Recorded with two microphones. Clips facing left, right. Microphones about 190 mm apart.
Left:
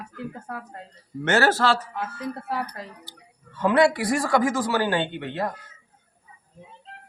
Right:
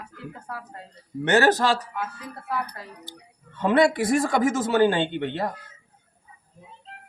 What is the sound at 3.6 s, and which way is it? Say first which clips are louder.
Speech: even; 25° right (ahead or behind).